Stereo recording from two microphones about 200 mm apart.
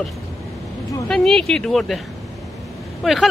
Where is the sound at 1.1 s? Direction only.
5° left (ahead or behind).